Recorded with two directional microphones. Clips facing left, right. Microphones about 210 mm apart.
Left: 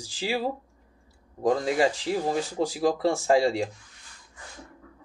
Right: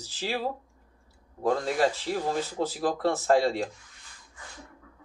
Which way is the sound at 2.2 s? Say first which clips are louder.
Left 2 dB; 15° left (ahead or behind).